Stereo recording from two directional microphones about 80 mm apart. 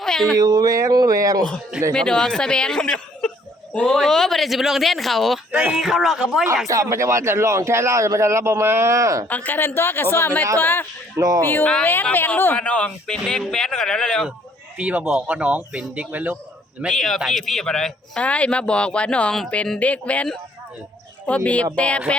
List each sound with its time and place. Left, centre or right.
0.0 s a sound: centre
0.3 s speech: right
1.9 s speech: centre
5.5 s speech: centre
5.7 s speech: centre
6.7 s speech: right
9.3 s speech: left
11.2 s speech: right
11.4 s speech: left
12.5 s speech: centre
14.8 s a man's voice: centre
16.9 s speech: centre
18.2 s speech: centre
21.2 s speech: centre